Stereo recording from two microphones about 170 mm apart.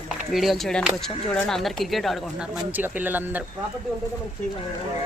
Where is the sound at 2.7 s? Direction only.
10° right (ahead or behind).